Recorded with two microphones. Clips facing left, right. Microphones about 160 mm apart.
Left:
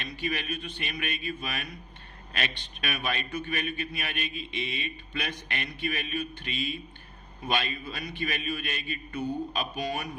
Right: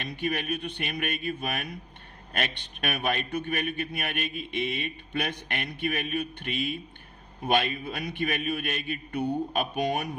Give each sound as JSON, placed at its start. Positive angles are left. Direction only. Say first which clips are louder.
{"t": 0.0, "sound": "a man's voice", "louder": "right 3 dB", "side_deg": -55}